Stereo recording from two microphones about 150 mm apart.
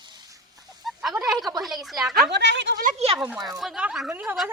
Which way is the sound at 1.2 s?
Centre (ahead or behind).